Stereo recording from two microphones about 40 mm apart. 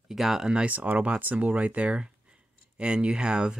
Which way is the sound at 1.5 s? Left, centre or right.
Right.